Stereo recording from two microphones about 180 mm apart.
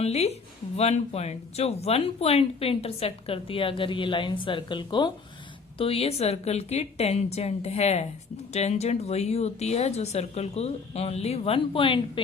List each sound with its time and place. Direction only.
0.0 s speech: 35° left (ahead or behind)